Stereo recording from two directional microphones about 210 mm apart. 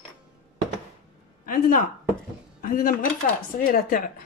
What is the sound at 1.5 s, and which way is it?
Speech, 40° left (ahead or behind).